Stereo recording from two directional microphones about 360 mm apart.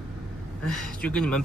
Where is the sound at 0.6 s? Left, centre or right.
Centre.